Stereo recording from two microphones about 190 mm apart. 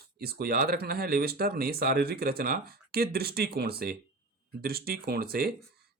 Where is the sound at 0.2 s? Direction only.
55° right (ahead or behind).